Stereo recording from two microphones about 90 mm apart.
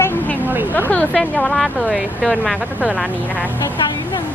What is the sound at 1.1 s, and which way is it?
Speech, 5° left (ahead or behind).